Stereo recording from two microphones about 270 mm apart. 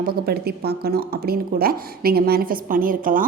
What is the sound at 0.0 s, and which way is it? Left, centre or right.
A woman's voice, right.